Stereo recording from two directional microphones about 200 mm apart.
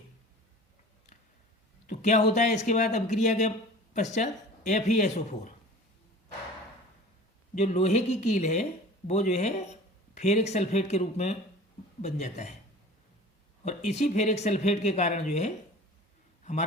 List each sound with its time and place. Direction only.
1.9 s speech: 35° left (ahead or behind)
7.5 s speech: 35° left (ahead or behind)
13.7 s a man's voice: 35° left (ahead or behind)